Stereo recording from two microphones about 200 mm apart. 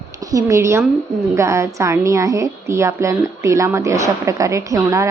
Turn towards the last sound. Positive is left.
turn(degrees=-15)  # may be behind; listen again after turning